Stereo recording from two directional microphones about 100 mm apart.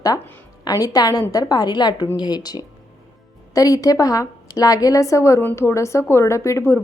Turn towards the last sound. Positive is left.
turn(degrees=30)  # may be behind; listen again after turning